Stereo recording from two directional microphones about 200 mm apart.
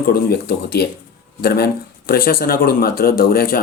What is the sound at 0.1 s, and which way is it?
Speech, 50° left (ahead or behind).